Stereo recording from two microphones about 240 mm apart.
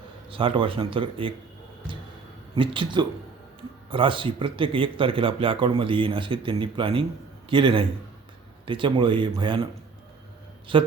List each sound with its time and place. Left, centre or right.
0.3 s speech: right
2.6 s speech: centre
10.7 s speech: right